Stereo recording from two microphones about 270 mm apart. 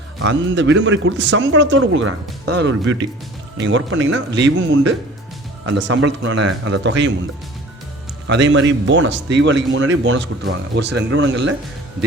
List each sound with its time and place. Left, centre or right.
0.2 s a man's voice: right
8.3 s speech: right